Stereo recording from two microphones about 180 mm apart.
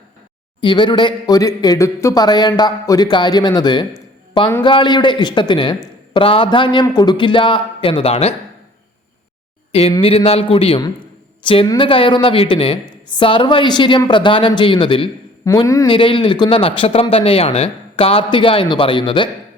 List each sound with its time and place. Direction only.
0.6 s speech: 25° left (ahead or behind)
10.0 s a man's voice: 30° left (ahead or behind)